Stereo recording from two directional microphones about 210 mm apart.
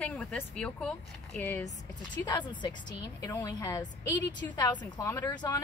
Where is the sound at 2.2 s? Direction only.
20° left (ahead or behind).